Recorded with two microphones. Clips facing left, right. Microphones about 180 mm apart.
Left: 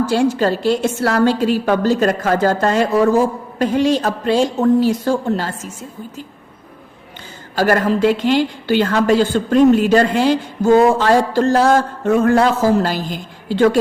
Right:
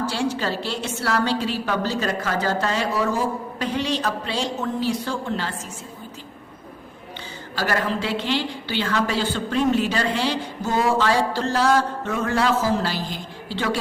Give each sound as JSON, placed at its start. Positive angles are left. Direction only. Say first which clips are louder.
{"t": 0.1, "sound": "a woman's voice", "louder": "left 9 dB", "side_deg": 45}
{"t": 7.5, "sound": "a woman's voice", "louder": "left 9 dB", "side_deg": 45}